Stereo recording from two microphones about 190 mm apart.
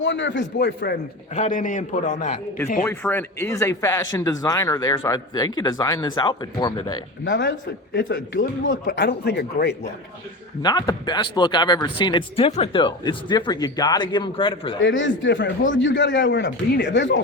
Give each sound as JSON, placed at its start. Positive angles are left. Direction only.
{"t": 0.0, "sound": "a man's voice", "side_deg": 75}
{"t": 1.4, "sound": "a man's voice", "side_deg": 40}
{"t": 2.8, "sound": "speech", "side_deg": 10}
{"t": 7.3, "sound": "a man's voice", "side_deg": 70}
{"t": 8.9, "sound": "speech", "side_deg": 60}
{"t": 10.6, "sound": "speech", "side_deg": 25}
{"t": 14.8, "sound": "a man's voice", "side_deg": 80}